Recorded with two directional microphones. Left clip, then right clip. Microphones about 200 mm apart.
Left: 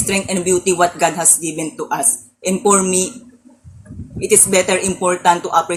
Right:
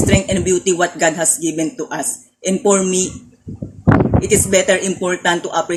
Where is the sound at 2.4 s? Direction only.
15° right (ahead or behind).